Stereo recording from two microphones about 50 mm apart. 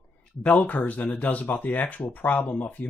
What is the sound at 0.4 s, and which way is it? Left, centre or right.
Speech, left.